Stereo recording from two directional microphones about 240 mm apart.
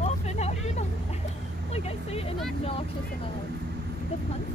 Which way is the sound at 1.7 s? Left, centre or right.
Left.